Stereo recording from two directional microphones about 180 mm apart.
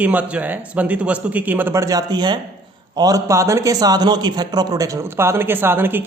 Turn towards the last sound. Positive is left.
turn(degrees=-10)  # may be behind; listen again after turning